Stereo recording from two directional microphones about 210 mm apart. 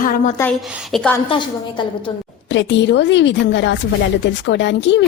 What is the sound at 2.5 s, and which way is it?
Speech, 60° left (ahead or behind).